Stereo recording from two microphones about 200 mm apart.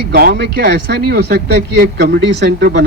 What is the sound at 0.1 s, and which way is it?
Speech, 55° right (ahead or behind).